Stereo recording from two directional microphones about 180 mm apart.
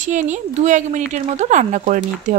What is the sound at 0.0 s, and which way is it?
Speech, 45° right (ahead or behind).